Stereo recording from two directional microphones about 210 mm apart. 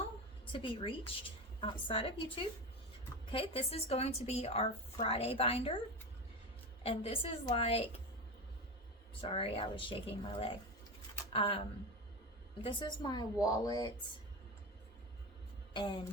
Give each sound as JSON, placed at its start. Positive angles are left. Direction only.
{"t": 0.5, "sound": "a woman's voice", "side_deg": 25}
{"t": 6.8, "sound": "a woman's voice", "side_deg": 25}
{"t": 9.2, "sound": "a woman's voice", "side_deg": 25}
{"t": 12.6, "sound": "a woman's voice", "side_deg": 20}
{"t": 15.7, "sound": "speech", "side_deg": 20}